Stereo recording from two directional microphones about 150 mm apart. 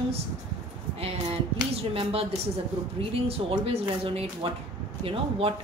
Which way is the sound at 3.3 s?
40° right (ahead or behind).